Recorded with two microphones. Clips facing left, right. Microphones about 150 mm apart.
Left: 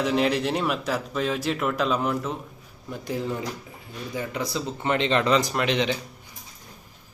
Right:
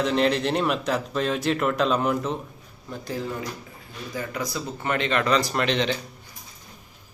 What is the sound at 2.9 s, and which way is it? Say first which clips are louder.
Speech: left 2 dB; 15° left (ahead or behind).